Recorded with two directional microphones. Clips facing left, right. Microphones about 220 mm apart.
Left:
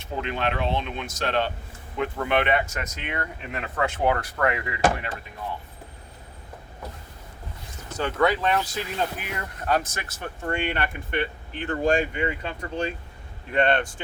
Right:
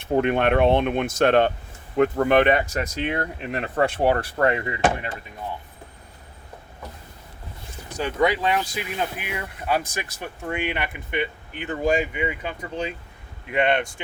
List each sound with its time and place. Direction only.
0.0 s speech: 55° right (ahead or behind); by 4.8 s 30° right (ahead or behind)
7.9 s speech: 15° right (ahead or behind)